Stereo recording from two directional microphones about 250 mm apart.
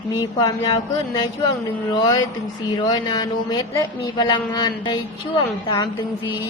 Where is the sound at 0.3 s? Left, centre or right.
Centre.